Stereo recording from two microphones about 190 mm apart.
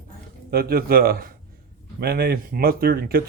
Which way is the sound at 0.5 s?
55° right (ahead or behind).